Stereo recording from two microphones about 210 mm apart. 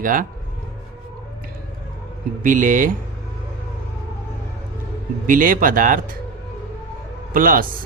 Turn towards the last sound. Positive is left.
turn(degrees=-40)  # may be behind; listen again after turning